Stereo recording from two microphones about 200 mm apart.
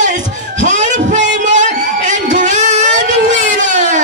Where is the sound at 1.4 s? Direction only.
40° right (ahead or behind).